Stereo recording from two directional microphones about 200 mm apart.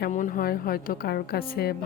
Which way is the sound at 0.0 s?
40° left (ahead or behind).